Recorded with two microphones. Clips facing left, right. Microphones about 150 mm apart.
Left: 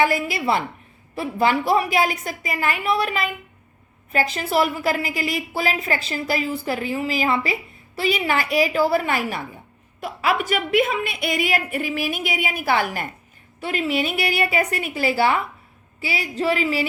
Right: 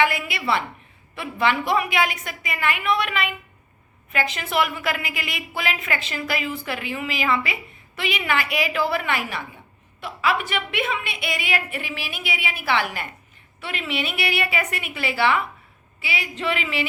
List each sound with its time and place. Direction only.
0.0 s a woman's voice: 40° left (ahead or behind)